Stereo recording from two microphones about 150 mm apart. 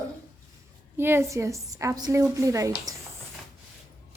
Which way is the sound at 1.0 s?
15° right (ahead or behind).